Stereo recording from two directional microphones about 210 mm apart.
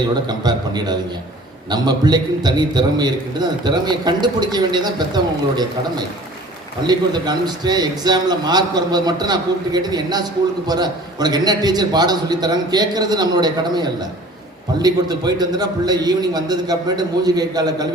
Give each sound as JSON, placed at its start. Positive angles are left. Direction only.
{"t": 0.3, "sound": "a man's voice", "side_deg": -20}
{"t": 6.8, "sound": "a man's voice", "side_deg": -20}